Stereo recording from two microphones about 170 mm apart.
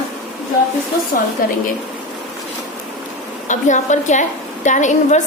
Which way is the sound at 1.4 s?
55° left (ahead or behind).